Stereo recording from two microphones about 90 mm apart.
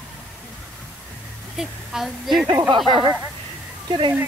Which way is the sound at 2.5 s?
60° right (ahead or behind).